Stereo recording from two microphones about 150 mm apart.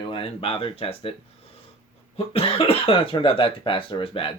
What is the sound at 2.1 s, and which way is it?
Speech, 40° left (ahead or behind).